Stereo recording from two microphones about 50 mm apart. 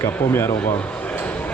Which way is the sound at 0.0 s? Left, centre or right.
Left.